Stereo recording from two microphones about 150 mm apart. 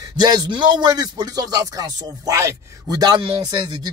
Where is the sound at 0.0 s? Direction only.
25° right (ahead or behind).